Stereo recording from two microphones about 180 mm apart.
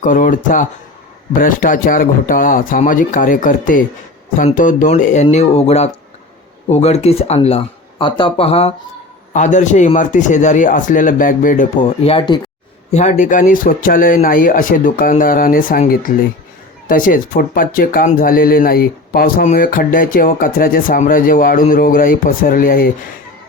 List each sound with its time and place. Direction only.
0.0 s speech: 45° left (ahead or behind)
12.0 s speech: 30° left (ahead or behind)
12.9 s speech: 40° left (ahead or behind)